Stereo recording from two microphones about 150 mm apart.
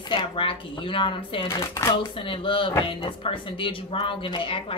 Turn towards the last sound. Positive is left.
turn(degrees=35)  # may be behind; listen again after turning